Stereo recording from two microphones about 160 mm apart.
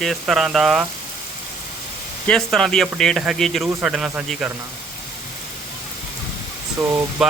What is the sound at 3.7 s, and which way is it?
Speech, 15° right (ahead or behind).